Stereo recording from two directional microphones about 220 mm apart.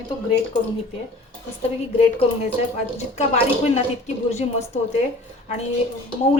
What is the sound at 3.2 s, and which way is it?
A woman's voice, 30° left (ahead or behind).